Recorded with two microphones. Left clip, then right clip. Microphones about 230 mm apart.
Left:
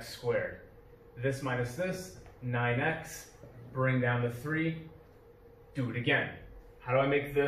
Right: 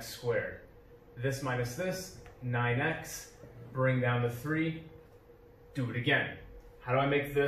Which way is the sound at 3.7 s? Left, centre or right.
Centre.